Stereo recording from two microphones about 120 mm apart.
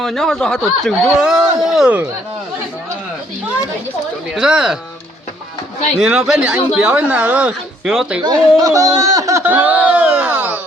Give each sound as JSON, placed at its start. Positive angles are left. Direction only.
{"t": 0.0, "sound": "speech", "side_deg": 5}
{"t": 4.4, "sound": "speech", "side_deg": -5}
{"t": 6.0, "sound": "speech", "side_deg": -5}
{"t": 8.2, "sound": "speech", "side_deg": -30}
{"t": 9.4, "sound": "a sound", "side_deg": -15}